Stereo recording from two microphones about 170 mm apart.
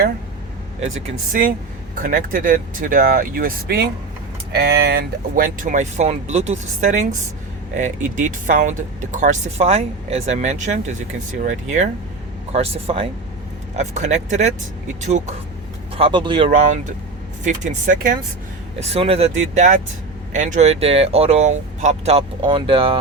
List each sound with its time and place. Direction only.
0.9 s speech: 45° right (ahead or behind)
4.5 s speech: 70° right (ahead or behind); by 15.4 s 40° right (ahead or behind)
16.0 s speech: 30° right (ahead or behind)
16.5 s speech: 50° right (ahead or behind)
18.8 s speech: 35° right (ahead or behind)